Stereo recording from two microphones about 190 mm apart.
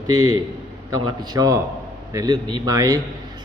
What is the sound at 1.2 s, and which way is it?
A man's voice, 20° right (ahead or behind).